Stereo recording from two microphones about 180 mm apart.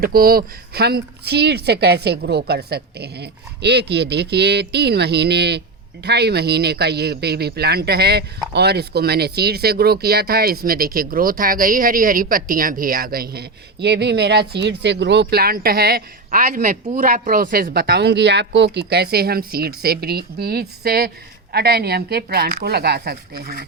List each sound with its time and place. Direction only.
0.0 s speech: 55° right (ahead or behind)